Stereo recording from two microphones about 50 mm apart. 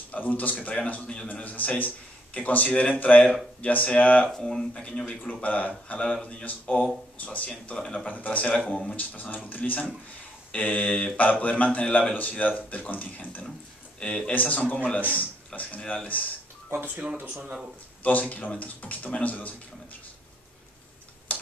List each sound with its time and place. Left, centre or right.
0.1 s speech: left
4.3 s speech: centre
4.8 s speech: left
8.1 s speech: left
8.7 s speech: left
13.9 s speech: left
14.3 s speech: left
16.7 s speech: right
18.0 s speech: left
21.3 s tick-tock: left